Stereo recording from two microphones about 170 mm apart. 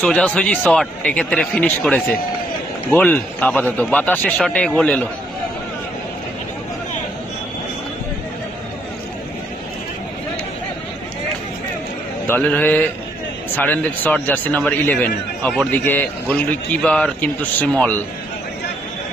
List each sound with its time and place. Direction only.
0.0 s a man's voice: 5° left (ahead or behind)
12.3 s a man's voice: 10° left (ahead or behind)